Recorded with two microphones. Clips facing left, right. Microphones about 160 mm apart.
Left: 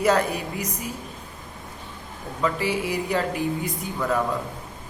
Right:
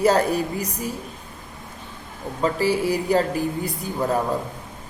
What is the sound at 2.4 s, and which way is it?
A woman's voice, 35° right (ahead or behind).